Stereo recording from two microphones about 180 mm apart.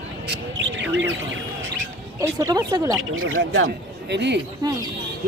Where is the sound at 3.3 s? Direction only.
90° right.